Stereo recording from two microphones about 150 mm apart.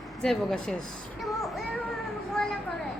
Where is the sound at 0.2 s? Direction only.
5° left (ahead or behind).